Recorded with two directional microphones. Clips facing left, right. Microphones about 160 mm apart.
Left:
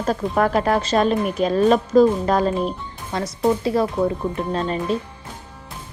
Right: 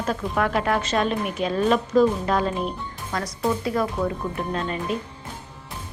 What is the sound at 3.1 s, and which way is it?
A woman's voice, 25° left (ahead or behind).